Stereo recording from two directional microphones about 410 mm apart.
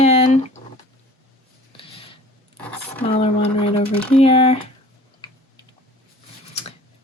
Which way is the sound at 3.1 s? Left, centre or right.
Centre.